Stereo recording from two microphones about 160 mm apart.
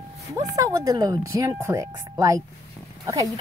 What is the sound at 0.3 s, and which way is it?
Speech, 20° right (ahead or behind).